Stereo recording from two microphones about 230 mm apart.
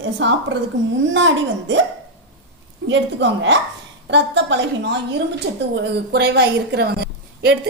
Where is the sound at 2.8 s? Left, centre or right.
Right.